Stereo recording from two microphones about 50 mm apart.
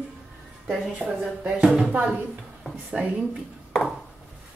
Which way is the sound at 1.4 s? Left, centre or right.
Centre.